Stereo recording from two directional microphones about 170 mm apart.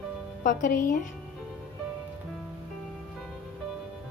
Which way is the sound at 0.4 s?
50° left (ahead or behind).